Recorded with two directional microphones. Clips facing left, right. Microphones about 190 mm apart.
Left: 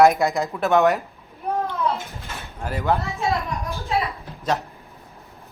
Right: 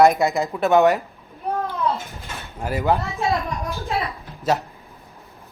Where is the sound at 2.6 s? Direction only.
10° right (ahead or behind).